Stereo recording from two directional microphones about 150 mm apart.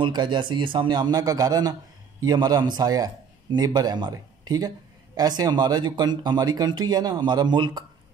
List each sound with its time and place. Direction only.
0.0 s speech: 30° right (ahead or behind)